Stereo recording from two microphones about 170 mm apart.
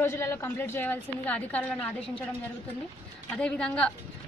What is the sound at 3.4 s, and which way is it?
Speech, 5° left (ahead or behind).